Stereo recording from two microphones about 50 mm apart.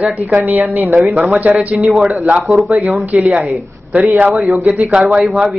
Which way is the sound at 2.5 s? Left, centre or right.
Centre.